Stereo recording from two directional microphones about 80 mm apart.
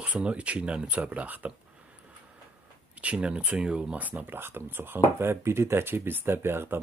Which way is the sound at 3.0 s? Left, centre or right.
Centre.